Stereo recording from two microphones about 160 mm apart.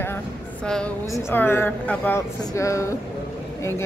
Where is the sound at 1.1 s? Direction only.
15° left (ahead or behind).